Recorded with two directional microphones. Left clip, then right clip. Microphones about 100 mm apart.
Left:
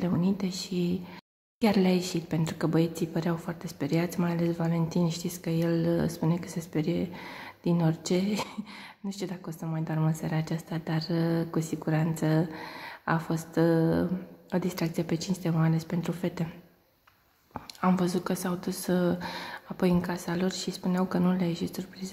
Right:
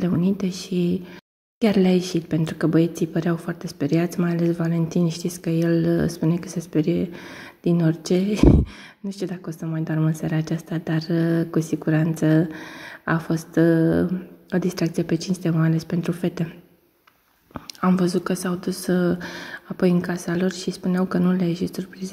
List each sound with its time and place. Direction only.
0.0 s a woman's voice: 25° right (ahead or behind)
17.6 s a woman's voice: 20° right (ahead or behind)